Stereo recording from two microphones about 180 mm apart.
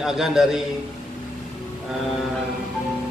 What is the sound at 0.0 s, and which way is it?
Speech, centre (ahead or behind).